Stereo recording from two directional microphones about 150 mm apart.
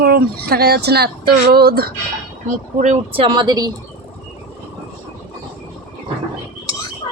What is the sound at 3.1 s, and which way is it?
Speech, 35° right (ahead or behind).